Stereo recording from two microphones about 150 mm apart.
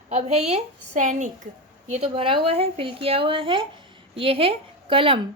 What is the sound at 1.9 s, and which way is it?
A woman's voice, 40° right (ahead or behind).